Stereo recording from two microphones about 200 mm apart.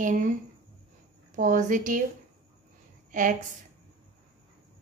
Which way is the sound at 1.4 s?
40° right (ahead or behind).